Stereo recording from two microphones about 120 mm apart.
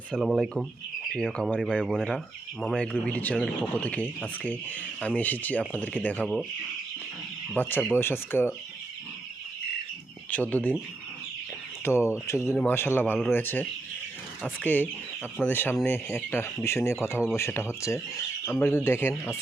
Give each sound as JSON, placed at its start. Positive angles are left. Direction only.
{"t": 0.1, "sound": "speech", "side_deg": 0}
{"t": 2.1, "sound": "speech", "side_deg": 0}
{"t": 3.2, "sound": "speech", "side_deg": 10}
{"t": 7.5, "sound": "speech", "side_deg": 15}
{"t": 10.2, "sound": "speech", "side_deg": 15}
{"t": 11.9, "sound": "speech", "side_deg": 20}